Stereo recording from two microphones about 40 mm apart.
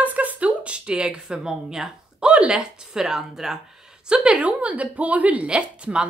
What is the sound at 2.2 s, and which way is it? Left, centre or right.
Speech, right.